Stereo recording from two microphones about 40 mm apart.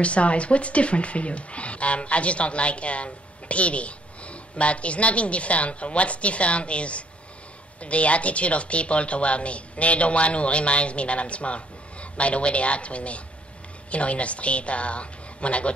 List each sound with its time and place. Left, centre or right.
0.0 s speech: left